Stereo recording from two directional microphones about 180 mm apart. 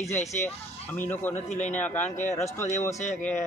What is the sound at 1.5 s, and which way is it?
Speech, 40° left (ahead or behind).